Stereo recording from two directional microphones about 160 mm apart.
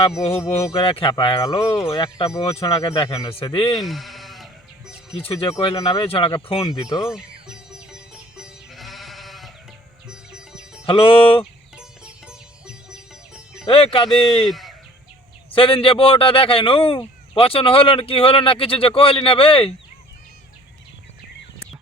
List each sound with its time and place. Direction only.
0.2 s speech: 40° left (ahead or behind)
1.7 s speech: 20° left (ahead or behind)
3.8 s bleat: centre (ahead or behind)
5.1 s speech: 35° left (ahead or behind)
6.7 s speech: 20° left (ahead or behind)
7.7 s music: 5° right (ahead or behind)
10.8 s speech: 35° left (ahead or behind)
11.8 s music: 5° right (ahead or behind)
13.7 s speech: 35° left (ahead or behind)
14.3 s speech: centre (ahead or behind)
15.5 s speech: 35° left (ahead or behind)